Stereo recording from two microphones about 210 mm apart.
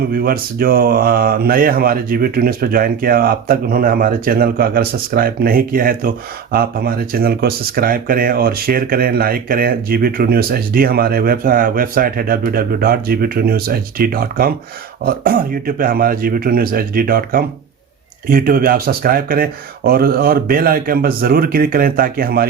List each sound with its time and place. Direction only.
0.0 s speech: 45° right (ahead or behind)